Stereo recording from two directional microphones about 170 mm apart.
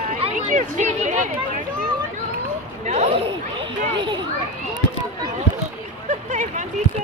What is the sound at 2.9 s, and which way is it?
Speech, 35° right (ahead or behind).